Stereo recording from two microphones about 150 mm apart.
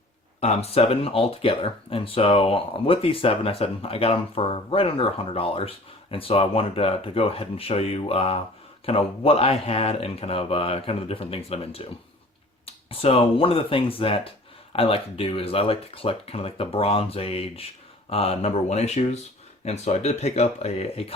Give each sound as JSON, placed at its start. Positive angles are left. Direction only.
{"t": 0.3, "sound": "speech", "side_deg": 45}